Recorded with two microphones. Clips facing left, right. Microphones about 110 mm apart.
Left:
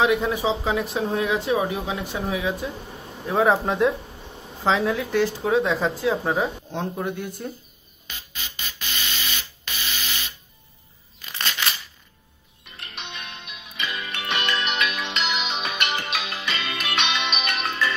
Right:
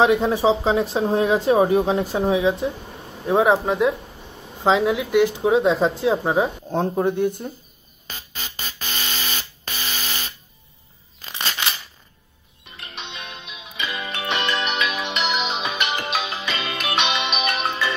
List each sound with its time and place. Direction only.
0.0 s speech: 30° right (ahead or behind)
3.6 s speech: centre (ahead or behind)
4.6 s speech: 15° right (ahead or behind)
8.1 s music: 40° right (ahead or behind)
11.2 s scissors: 30° right (ahead or behind)
13.7 s music: 15° right (ahead or behind)
15.3 s music: 40° right (ahead or behind)
16.3 s music: 25° right (ahead or behind)
17.3 s music: 45° right (ahead or behind)
17.6 s music: 15° right (ahead or behind)